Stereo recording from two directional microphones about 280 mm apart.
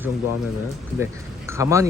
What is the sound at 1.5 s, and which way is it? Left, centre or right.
Speech, centre.